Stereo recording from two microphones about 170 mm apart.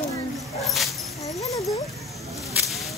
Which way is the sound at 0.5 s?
Centre (ahead or behind).